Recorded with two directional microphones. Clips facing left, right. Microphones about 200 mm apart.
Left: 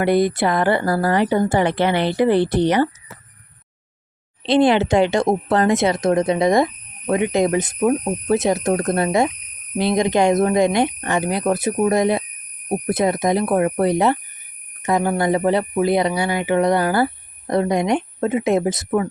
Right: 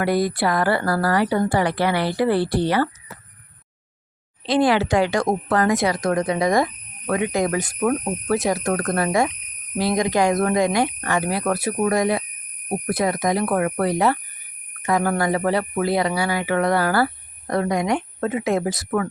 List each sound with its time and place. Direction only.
0.0 s speech: 20° left (ahead or behind)
4.4 s speech: 25° left (ahead or behind)